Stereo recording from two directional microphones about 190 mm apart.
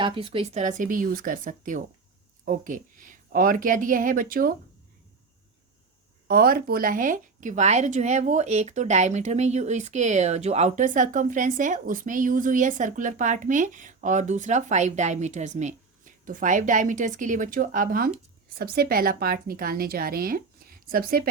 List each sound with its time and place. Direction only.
0.0 s a woman's voice: 30° right (ahead or behind); by 4.5 s 50° right (ahead or behind)
6.2 s a woman's voice: 50° right (ahead or behind)